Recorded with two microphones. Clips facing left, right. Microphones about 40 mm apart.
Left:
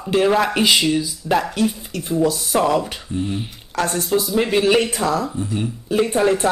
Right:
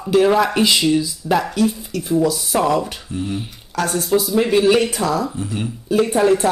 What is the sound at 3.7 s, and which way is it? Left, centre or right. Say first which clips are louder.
Speech: even; centre.